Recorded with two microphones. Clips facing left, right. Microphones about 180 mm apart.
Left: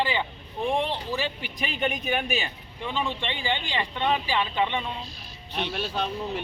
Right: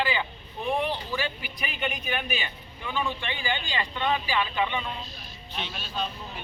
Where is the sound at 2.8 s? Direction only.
30° left (ahead or behind).